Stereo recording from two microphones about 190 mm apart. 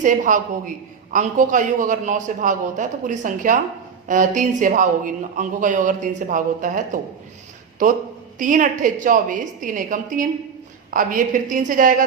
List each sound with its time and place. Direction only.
0.0 s speech: 45° right (ahead or behind)